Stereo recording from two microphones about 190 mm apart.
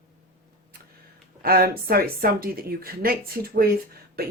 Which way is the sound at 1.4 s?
50° right (ahead or behind).